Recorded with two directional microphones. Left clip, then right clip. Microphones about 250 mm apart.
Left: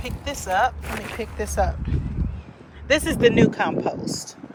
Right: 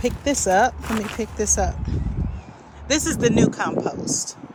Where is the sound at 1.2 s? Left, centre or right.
Centre.